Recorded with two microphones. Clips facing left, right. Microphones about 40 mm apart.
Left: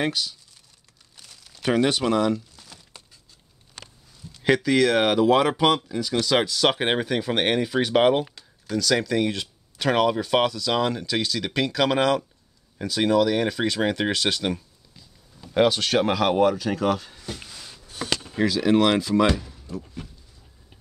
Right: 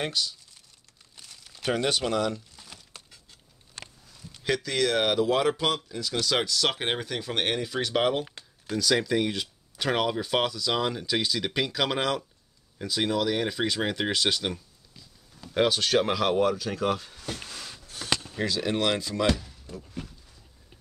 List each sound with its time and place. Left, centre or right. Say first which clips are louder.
0.0 s speech: left 4 dB; centre
1.6 s speech: left 5 dB; centre
2.5 s crumpling: even; centre
4.4 s a sound: left 7 dB; left
4.6 s speech: left 4 dB; centre
8.6 s speech: left 2 dB; centre
17.4 s a sound: right 2 dB; right
17.8 s a sound: left 2 dB; left
18.4 s speech: left 9 dB; centre